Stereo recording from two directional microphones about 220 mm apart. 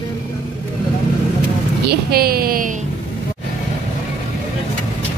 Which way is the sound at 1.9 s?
45° right (ahead or behind).